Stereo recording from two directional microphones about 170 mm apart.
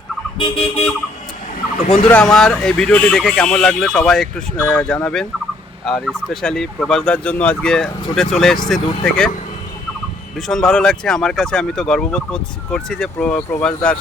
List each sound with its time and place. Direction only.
0.3 s car alarm: 30° left (ahead or behind)
2.0 s speech: 5° left (ahead or behind)
10.3 s speech: centre (ahead or behind)